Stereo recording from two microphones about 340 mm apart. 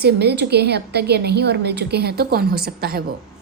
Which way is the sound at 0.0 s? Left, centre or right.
Right.